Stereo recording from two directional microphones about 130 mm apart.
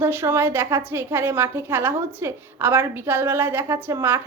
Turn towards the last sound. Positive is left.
turn(degrees=-20)  # may be behind; listen again after turning